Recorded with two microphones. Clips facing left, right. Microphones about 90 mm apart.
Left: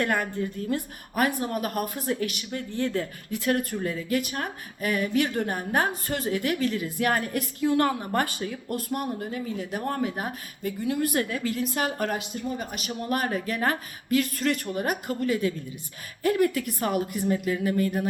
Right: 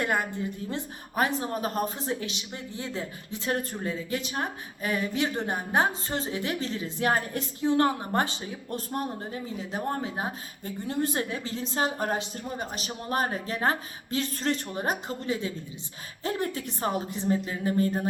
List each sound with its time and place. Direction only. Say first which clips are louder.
0.0 s a woman's voice: left 2 dB; 20° right (ahead or behind)